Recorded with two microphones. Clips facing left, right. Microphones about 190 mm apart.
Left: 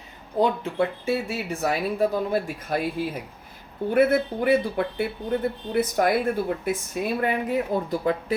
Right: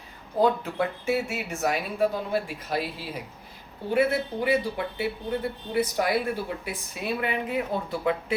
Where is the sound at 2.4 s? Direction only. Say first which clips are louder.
Left 3 dB; 50° left (ahead or behind).